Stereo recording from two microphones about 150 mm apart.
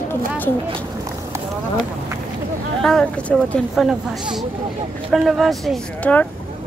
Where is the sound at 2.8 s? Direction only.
5° left (ahead or behind).